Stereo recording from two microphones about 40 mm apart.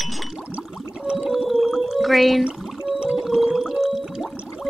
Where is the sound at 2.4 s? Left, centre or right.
Right.